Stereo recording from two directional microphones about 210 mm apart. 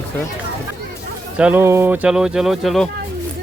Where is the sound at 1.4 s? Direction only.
5° right (ahead or behind).